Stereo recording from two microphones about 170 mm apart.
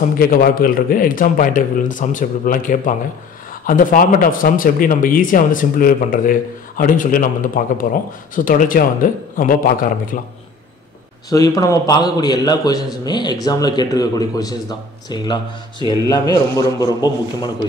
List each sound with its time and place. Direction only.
0.2 s a man's voice: 55° left (ahead or behind)
11.2 s a man's voice: 20° left (ahead or behind)